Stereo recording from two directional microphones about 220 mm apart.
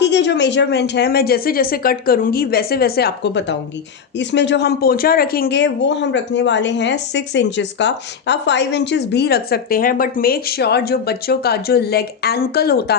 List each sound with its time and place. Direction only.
0.0 s speech: 55° left (ahead or behind)